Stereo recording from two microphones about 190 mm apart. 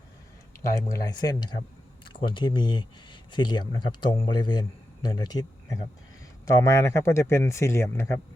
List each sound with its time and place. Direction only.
0.6 s speech: 15° left (ahead or behind)